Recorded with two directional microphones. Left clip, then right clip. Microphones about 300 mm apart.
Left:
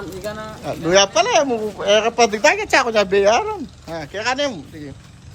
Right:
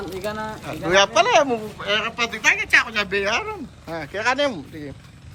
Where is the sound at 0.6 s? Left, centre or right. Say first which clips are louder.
Left 3 dB; centre.